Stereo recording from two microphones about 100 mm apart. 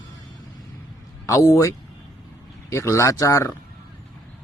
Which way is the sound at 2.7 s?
30° left (ahead or behind).